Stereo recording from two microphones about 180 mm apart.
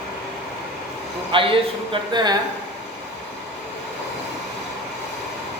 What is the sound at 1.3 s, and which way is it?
Speech, 30° right (ahead or behind).